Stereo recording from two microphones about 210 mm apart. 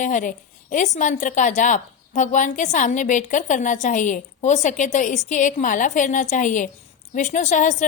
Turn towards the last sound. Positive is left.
turn(degrees=35)  # may be behind; listen again after turning